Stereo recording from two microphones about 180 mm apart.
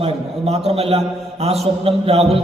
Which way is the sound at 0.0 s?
35° right (ahead or behind).